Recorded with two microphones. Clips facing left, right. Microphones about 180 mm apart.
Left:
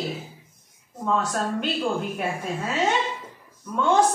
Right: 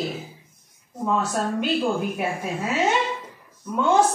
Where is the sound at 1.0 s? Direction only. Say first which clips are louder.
Right 1 dB; 10° right (ahead or behind).